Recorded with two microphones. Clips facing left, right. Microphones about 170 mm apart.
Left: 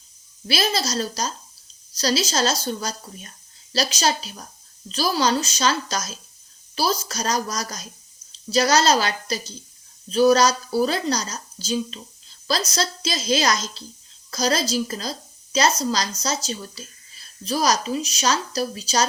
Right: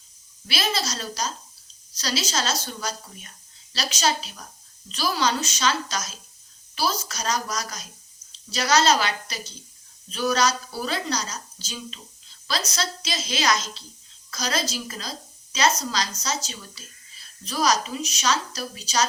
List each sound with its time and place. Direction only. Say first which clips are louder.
0.4 s a woman's voice: left 4 dB; 40° left (ahead or behind)